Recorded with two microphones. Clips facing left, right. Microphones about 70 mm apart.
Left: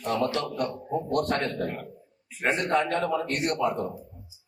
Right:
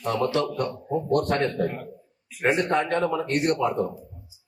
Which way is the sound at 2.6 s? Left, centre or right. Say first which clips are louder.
Right 2 dB; right.